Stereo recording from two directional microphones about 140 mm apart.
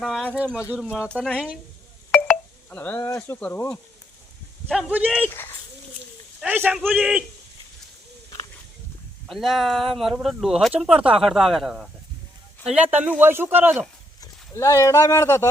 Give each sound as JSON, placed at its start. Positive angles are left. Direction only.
{"t": 0.0, "sound": "a man's voice", "side_deg": 0}
{"t": 1.0, "sound": "speech", "side_deg": 5}
{"t": 2.6, "sound": "speech", "side_deg": 15}
{"t": 4.7, "sound": "a man's voice", "side_deg": -5}
{"t": 6.4, "sound": "a man's voice", "side_deg": -10}
{"t": 9.3, "sound": "a man's voice", "side_deg": 0}
{"t": 14.2, "sound": "speech", "side_deg": 25}